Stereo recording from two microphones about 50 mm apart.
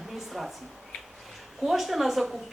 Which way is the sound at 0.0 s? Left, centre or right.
Centre.